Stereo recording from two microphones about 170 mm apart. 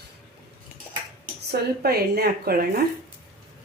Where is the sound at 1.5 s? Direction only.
65° right (ahead or behind).